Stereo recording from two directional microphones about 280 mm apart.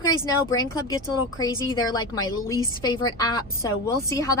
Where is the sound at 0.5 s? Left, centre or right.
Centre.